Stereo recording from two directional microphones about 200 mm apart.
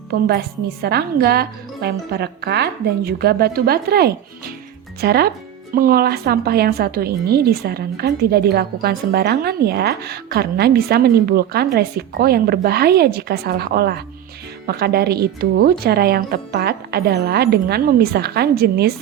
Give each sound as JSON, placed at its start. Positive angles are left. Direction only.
{"t": 0.1, "sound": "a woman's voice", "side_deg": -50}